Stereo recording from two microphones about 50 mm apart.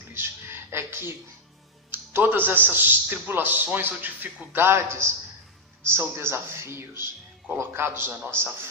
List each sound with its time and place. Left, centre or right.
0.1 s a sound: right
1.9 s a man's voice: right
4.5 s a man's voice: right